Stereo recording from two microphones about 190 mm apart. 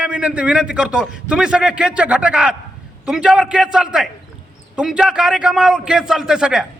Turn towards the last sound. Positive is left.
turn(degrees=0)  # may be behind; listen again after turning